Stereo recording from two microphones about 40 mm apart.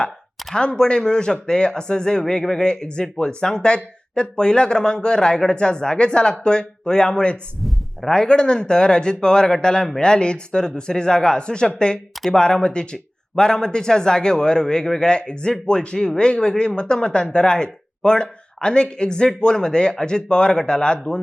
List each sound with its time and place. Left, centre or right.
0.5 s speech: left
2.2 s speech: centre
2.6 s speech: left
7.6 s a sound: centre
8.1 s speech: left